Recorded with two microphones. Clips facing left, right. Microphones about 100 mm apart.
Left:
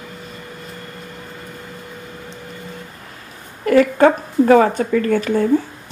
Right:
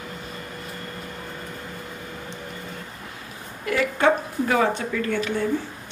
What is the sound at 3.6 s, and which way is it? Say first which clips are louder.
Speech: left 8 dB; 45° left (ahead or behind).